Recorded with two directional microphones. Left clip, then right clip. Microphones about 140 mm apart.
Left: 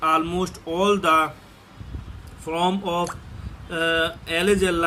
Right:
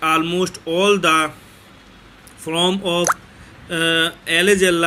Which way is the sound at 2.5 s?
20° right (ahead or behind).